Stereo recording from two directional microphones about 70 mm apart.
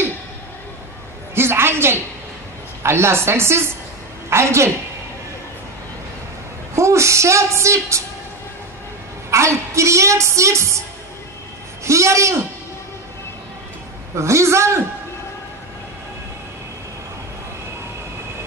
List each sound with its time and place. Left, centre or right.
1.3 s a sound: right
2.8 s speech: right
6.7 s a woman's voice: right
9.3 s a woman's voice: right
11.8 s a man's voice: right
14.1 s a woman's voice: right